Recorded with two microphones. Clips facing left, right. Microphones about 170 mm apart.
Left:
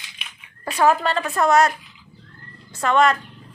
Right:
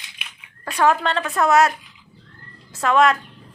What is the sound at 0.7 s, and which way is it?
A woman's voice, 5° left (ahead or behind).